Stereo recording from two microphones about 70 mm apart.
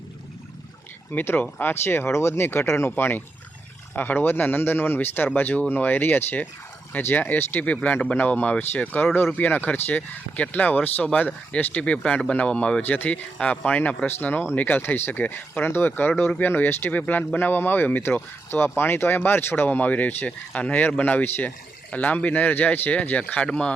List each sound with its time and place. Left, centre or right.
1.1 s speech: left; by 12.8 s centre
12.8 s speech: left